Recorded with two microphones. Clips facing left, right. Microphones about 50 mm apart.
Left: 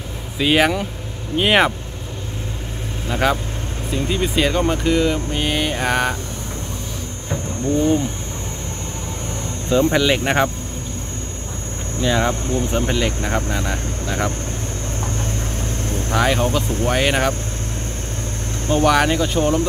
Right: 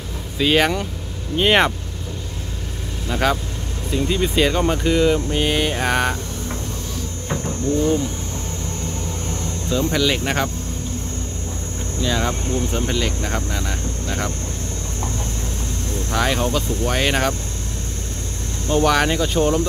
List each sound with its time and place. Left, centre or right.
0.4 s speech: centre
3.1 s speech: centre
7.6 s speech: left
9.3 s speech: left
12.0 s speech: centre
15.9 s vehicle: left
16.2 s speech: centre
18.9 s speech: centre